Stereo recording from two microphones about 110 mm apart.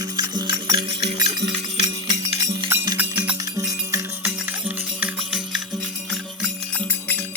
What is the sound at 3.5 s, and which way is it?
Music, 30° right (ahead or behind).